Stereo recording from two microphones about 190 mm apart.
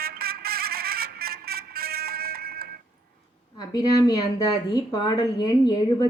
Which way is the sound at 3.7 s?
20° left (ahead or behind).